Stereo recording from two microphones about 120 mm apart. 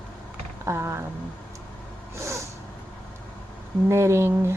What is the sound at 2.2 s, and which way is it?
Snort, 25° right (ahead or behind).